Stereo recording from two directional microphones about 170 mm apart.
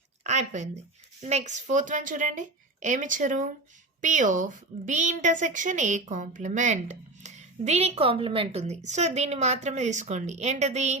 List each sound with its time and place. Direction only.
0.3 s a woman's voice: 45° right (ahead or behind)